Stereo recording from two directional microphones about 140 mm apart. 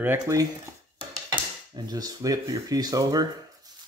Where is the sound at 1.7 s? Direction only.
30° right (ahead or behind).